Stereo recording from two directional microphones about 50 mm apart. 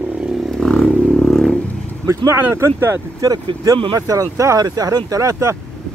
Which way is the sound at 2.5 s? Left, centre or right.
Right.